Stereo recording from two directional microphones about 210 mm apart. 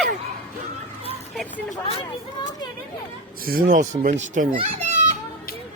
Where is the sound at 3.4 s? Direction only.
45° right (ahead or behind).